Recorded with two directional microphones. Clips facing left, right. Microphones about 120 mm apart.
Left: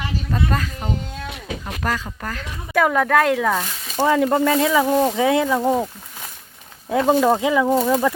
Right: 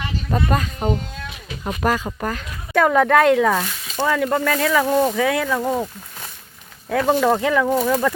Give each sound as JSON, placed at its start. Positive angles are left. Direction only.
{"t": 0.3, "sound": "speech", "side_deg": -20}
{"t": 2.0, "sound": "speech", "side_deg": -20}
{"t": 2.7, "sound": "speech", "side_deg": 0}
{"t": 4.0, "sound": "speech", "side_deg": 25}
{"t": 4.9, "sound": "speech", "side_deg": 5}
{"t": 5.1, "sound": "speech", "side_deg": 25}
{"t": 6.9, "sound": "speech", "side_deg": 20}
{"t": 7.3, "sound": "speech", "side_deg": 10}